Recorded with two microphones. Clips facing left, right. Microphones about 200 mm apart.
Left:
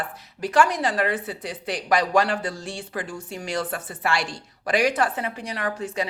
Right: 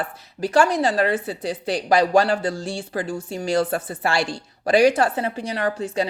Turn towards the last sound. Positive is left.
turn(degrees=-30)  # may be behind; listen again after turning